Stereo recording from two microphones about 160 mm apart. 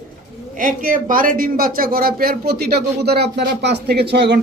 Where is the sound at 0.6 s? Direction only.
60° right (ahead or behind).